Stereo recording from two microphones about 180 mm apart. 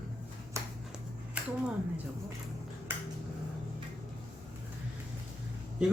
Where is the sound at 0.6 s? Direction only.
15° right (ahead or behind).